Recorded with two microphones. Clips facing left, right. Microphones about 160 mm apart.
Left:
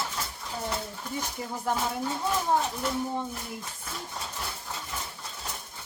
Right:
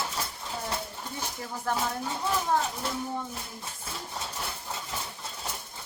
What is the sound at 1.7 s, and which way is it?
Speech, 15° left (ahead or behind).